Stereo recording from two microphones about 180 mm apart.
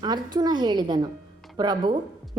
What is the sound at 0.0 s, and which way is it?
A woman's voice, 20° right (ahead or behind).